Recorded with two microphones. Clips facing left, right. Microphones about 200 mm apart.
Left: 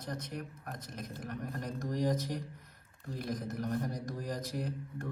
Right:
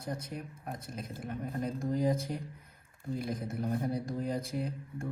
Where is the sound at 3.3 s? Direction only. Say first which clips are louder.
Right 1 dB; 30° right (ahead or behind).